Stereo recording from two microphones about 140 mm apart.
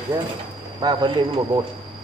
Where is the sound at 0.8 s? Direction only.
30° right (ahead or behind).